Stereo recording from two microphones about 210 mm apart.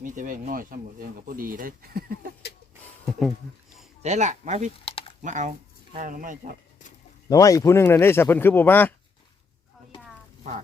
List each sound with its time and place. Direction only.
0.0 s speech: 40° right (ahead or behind)
3.1 s speech: centre (ahead or behind)
4.0 s speech: 35° right (ahead or behind)
4.9 s a sound: 25° left (ahead or behind)
5.2 s speech: 35° right (ahead or behind)
7.3 s speech: 15° left (ahead or behind)